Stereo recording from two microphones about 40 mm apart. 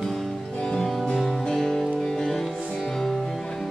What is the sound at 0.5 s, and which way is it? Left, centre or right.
Music, left.